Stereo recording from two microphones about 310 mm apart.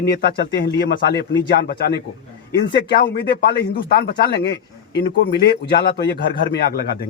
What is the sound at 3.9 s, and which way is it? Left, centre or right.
Speech, left.